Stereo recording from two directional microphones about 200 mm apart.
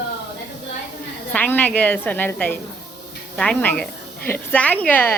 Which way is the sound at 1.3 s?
10° left (ahead or behind).